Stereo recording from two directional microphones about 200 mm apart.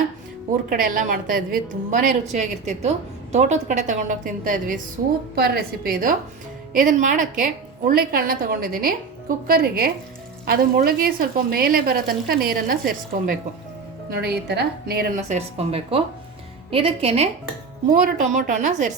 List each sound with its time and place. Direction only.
0.7 s a woman's voice: 45° right (ahead or behind)
15.3 s speech: 30° right (ahead or behind)
17.9 s a woman's voice: 40° right (ahead or behind)